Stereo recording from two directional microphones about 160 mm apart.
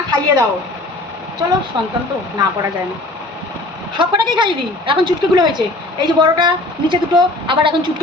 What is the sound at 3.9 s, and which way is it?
A woman's voice, 30° right (ahead or behind).